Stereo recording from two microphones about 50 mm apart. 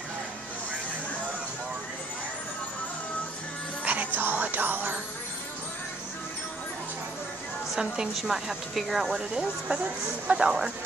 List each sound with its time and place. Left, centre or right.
3.8 s music: right
7.7 s a woman's voice: centre